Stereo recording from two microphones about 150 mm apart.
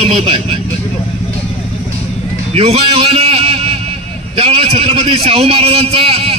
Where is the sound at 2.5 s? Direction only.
45° right (ahead or behind).